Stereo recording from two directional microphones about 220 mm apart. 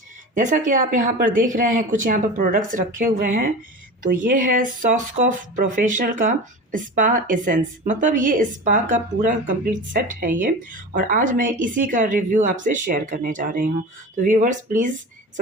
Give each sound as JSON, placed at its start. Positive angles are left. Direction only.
{"t": 0.3, "sound": "speech", "side_deg": -35}